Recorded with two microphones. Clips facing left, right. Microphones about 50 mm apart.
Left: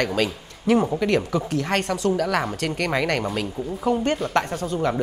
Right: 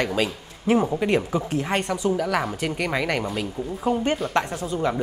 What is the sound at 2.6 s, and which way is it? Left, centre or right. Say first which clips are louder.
Speech: left 1 dB; centre.